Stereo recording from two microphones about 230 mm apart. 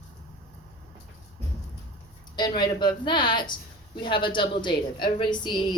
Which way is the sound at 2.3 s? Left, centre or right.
Centre.